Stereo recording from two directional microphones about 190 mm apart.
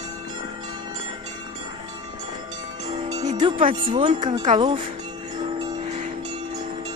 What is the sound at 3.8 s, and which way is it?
Speech, 25° right (ahead or behind).